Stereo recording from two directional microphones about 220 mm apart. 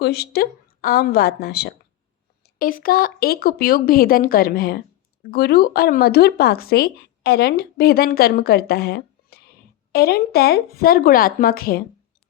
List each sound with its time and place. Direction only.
0.0 s speech: 45° left (ahead or behind)